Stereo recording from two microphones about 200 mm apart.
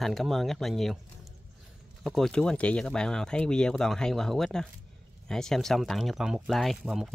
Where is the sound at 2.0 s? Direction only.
Centre (ahead or behind).